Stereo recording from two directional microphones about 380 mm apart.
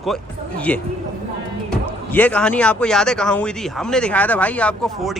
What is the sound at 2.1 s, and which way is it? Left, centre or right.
A man's voice, centre.